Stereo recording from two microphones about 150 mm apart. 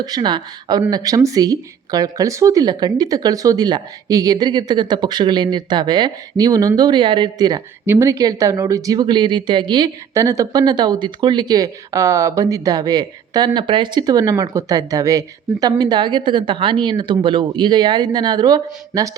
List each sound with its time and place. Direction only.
0.0 s speech: 30° right (ahead or behind)